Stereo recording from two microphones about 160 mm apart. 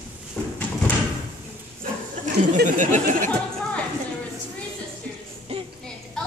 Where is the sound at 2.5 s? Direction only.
50° right (ahead or behind).